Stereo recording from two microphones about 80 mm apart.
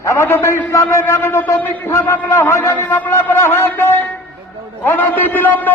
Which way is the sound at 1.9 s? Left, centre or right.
Left.